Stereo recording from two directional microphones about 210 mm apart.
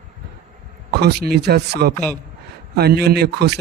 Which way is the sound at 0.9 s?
50° right (ahead or behind).